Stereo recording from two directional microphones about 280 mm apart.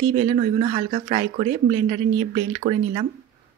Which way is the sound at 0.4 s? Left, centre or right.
Right.